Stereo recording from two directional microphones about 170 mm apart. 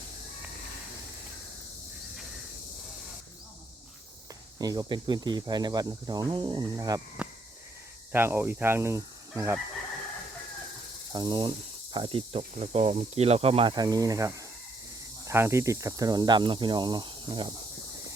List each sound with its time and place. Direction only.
4.5 s cricket: 20° right (ahead or behind)
8.1 s speech: 15° right (ahead or behind)
11.1 s cricket: 25° right (ahead or behind)